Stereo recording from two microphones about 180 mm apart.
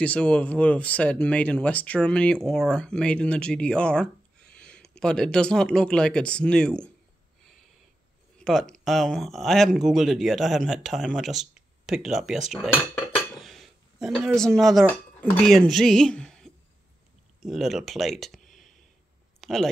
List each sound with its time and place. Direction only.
0.0 s speech: 5° left (ahead or behind)
8.4 s speech: 5° left (ahead or behind)
12.9 s dishes: centre (ahead or behind)
14.6 s speech: centre (ahead or behind)